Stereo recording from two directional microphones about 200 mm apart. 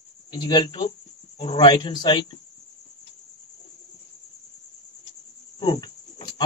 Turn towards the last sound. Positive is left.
turn(degrees=20)  # may be behind; listen again after turning